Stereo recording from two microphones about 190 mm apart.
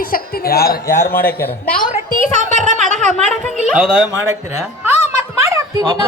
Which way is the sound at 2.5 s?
40° right (ahead or behind).